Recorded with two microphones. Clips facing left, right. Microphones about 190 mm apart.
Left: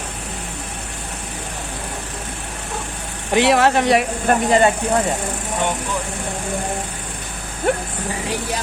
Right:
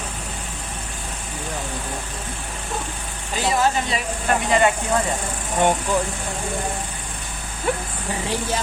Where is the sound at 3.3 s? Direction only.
75° left (ahead or behind).